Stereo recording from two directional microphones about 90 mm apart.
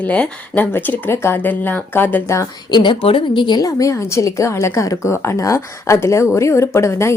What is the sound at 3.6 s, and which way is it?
A woman's voice, 40° left (ahead or behind).